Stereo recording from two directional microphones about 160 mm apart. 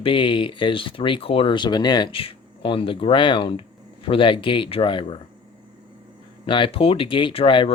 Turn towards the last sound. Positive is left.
turn(degrees=30)  # may be behind; listen again after turning